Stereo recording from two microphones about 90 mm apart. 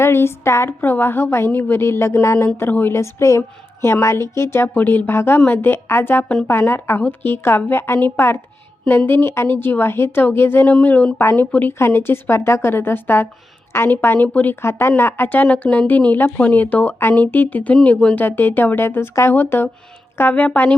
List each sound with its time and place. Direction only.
0.0 s a woman's voice: 30° left (ahead or behind)